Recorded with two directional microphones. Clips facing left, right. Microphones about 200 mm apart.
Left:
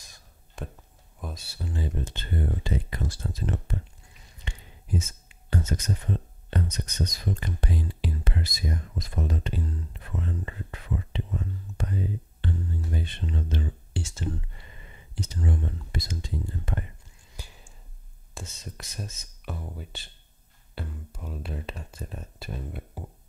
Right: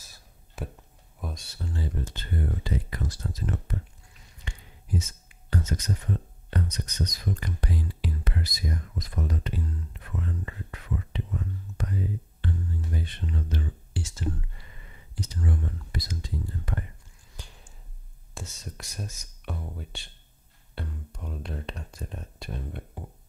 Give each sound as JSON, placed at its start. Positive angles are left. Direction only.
{"t": 0.0, "sound": "crow", "side_deg": -5}
{"t": 1.2, "sound": "speech", "side_deg": 5}
{"t": 17.4, "sound": "whispering", "side_deg": 10}
{"t": 18.3, "sound": "speech", "side_deg": 0}